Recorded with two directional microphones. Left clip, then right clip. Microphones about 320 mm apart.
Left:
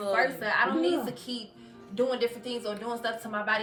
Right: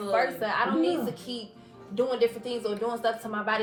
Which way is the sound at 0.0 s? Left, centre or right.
Centre.